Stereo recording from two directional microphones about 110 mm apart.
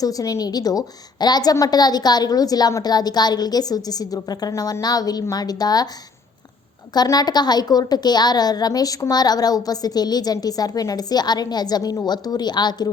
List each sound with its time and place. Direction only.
0.0 s a woman's voice: 35° left (ahead or behind)
6.9 s a woman's voice: 35° left (ahead or behind)